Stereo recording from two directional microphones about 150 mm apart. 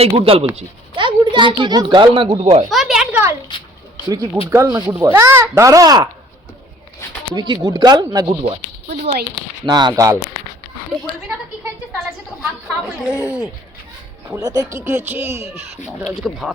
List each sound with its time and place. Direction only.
0.0 s speech: 40° right (ahead or behind)
2.6 s a sound: centre (ahead or behind)
4.4 s speech: 20° right (ahead or behind)
7.3 s speech: 30° right (ahead or behind)
8.4 s speech: 50° right (ahead or behind)
9.6 s speech: 25° right (ahead or behind)
12.4 s speech: 5° right (ahead or behind)
14.3 s speech: 25° right (ahead or behind)
16.0 s speech: centre (ahead or behind)